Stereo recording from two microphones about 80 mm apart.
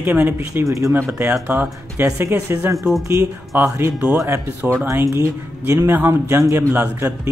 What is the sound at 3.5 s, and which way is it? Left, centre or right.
Speech, right.